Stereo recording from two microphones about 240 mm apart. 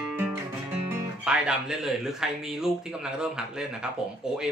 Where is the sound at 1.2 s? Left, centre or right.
Centre.